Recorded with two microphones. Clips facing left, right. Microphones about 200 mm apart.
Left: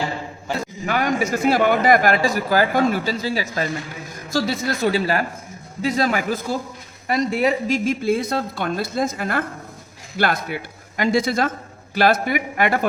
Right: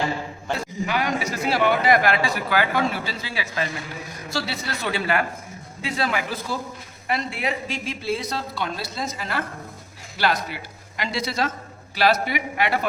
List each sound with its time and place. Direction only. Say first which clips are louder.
0.9 s speech: left 6 dB; 45° left (ahead or behind)